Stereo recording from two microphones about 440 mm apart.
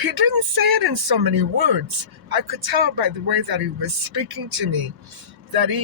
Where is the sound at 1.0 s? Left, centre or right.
Right.